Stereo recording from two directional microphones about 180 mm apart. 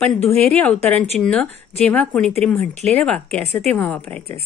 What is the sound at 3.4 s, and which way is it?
Speech, 35° right (ahead or behind).